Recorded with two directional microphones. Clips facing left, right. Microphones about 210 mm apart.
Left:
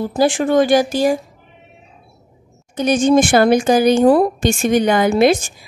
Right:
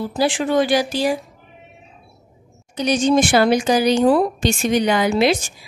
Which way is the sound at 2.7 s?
50° left (ahead or behind).